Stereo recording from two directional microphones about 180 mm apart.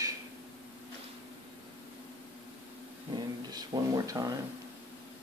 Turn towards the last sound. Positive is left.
turn(degrees=-20)  # may be behind; listen again after turning